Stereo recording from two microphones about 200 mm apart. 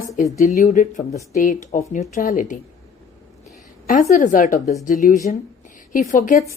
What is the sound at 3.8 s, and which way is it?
Speech, 40° left (ahead or behind).